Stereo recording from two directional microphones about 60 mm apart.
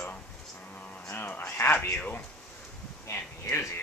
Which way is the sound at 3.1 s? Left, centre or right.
Left.